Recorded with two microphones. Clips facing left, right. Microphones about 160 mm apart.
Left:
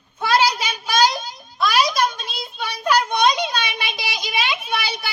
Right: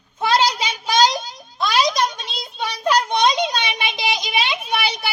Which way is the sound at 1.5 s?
25° right (ahead or behind).